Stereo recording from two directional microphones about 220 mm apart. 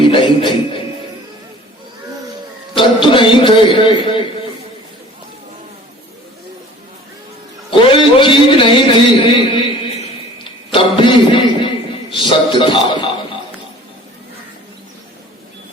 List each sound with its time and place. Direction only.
0.1 s music: 20° left (ahead or behind)
2.7 s a man's voice: 20° left (ahead or behind)
7.7 s a sound: 20° left (ahead or behind)
12.2 s music: 20° left (ahead or behind)